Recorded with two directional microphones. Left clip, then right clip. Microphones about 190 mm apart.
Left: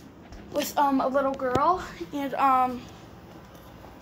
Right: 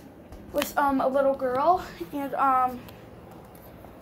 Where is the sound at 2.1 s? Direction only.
15° left (ahead or behind).